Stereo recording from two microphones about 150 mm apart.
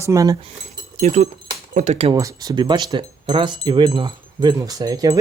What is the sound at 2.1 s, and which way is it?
Speech, 25° right (ahead or behind).